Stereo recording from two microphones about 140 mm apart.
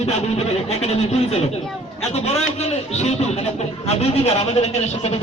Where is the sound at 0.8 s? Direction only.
50° left (ahead or behind).